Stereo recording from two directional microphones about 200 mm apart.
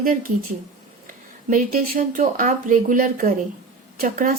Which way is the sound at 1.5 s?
45° right (ahead or behind).